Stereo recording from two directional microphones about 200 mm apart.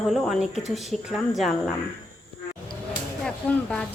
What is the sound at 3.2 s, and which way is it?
Speech, 5° left (ahead or behind).